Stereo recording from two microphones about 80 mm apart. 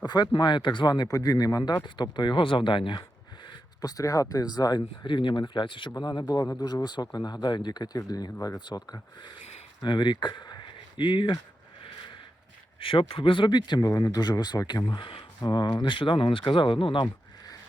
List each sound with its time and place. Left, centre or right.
0.0 s speech: left
0.3 s speech: left
1.8 s speech: left
3.8 s speech: left
5.0 s speech: left
6.0 s speech: left
8.6 s speech: left
9.8 s speech: left
12.8 s speech: left
14.8 s speech: left
15.4 s speech: left